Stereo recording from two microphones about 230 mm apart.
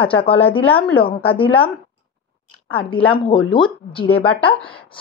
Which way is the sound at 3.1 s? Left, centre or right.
Left.